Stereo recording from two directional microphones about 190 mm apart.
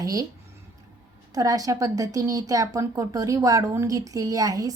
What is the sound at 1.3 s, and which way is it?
Speech, 20° right (ahead or behind).